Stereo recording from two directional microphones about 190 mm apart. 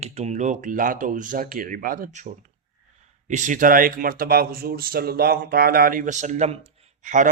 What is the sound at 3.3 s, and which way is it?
Speech, 40° right (ahead or behind).